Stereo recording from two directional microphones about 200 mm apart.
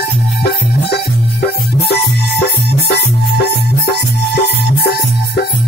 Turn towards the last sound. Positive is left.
turn(degrees=50)  # may be behind; listen again after turning